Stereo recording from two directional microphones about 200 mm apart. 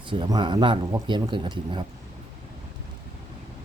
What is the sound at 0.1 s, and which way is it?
Speech, 25° right (ahead or behind).